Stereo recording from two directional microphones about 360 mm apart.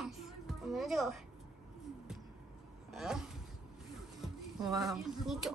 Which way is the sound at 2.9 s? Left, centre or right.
Centre.